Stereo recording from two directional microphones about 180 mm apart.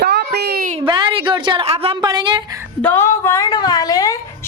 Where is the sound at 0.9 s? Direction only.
25° right (ahead or behind).